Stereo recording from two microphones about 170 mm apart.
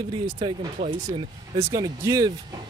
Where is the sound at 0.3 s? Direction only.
30° right (ahead or behind).